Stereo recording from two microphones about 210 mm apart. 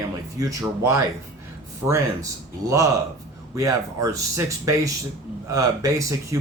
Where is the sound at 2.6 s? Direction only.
15° right (ahead or behind).